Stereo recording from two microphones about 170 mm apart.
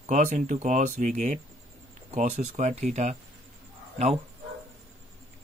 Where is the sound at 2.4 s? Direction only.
40° right (ahead or behind).